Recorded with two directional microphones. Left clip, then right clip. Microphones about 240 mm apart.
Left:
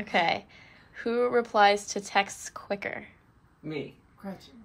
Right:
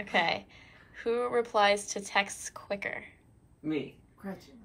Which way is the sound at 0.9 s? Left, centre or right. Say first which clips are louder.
Left 3 dB; left.